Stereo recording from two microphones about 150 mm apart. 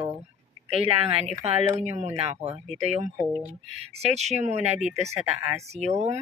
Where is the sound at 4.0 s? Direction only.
45° right (ahead or behind).